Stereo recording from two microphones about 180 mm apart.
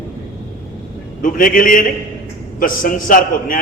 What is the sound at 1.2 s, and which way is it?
A man's voice, 50° left (ahead or behind).